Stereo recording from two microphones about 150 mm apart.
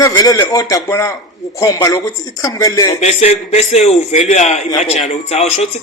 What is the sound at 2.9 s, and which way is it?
A man's voice, 45° left (ahead or behind).